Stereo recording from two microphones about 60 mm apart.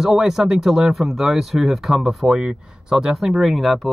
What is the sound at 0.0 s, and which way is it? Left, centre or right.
Speech, centre.